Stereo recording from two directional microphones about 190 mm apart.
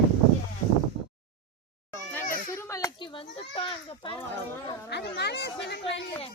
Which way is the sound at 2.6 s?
15° left (ahead or behind).